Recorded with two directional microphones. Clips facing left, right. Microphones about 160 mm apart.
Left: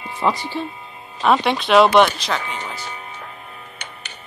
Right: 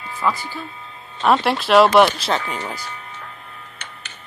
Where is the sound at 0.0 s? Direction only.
25° left (ahead or behind).